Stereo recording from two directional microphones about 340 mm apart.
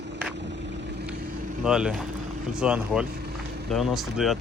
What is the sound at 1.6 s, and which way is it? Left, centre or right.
Speech, centre.